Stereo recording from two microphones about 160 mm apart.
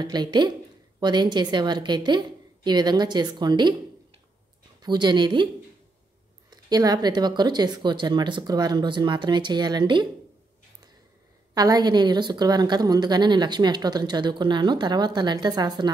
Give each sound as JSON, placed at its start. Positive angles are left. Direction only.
{"t": 0.0, "sound": "a woman's voice", "side_deg": -25}
{"t": 4.8, "sound": "a woman's voice", "side_deg": -25}
{"t": 6.5, "sound": "a woman's voice", "side_deg": -25}
{"t": 11.5, "sound": "a woman's voice", "side_deg": -25}